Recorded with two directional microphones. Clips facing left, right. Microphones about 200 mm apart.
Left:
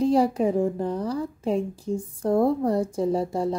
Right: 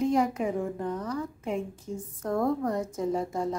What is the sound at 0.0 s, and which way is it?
A woman's voice, 35° left (ahead or behind).